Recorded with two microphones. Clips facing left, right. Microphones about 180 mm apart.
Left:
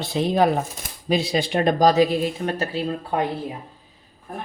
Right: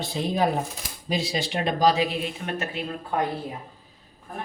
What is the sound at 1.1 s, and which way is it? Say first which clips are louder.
Speech: left 6 dB; 60° left (ahead or behind).